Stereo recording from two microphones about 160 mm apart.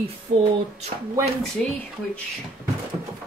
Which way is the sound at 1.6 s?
5° left (ahead or behind).